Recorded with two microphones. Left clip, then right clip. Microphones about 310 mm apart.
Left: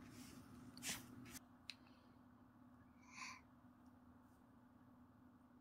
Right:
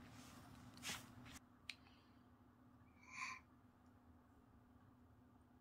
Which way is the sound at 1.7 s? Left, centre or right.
Centre.